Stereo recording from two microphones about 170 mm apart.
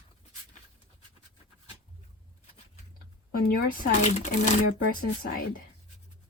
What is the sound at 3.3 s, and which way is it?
Speech, 60° left (ahead or behind).